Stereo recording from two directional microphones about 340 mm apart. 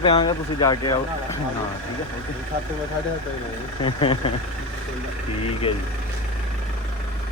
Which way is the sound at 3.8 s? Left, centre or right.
Centre.